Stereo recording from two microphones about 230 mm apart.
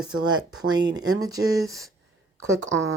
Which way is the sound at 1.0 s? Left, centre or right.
Right.